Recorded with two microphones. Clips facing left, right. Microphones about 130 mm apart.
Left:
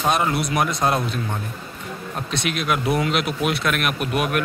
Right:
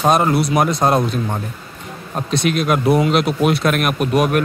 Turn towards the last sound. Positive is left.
turn(degrees=-40)  # may be behind; listen again after turning